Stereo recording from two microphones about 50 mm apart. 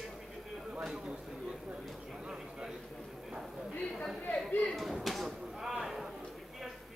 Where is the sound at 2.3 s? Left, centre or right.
Centre.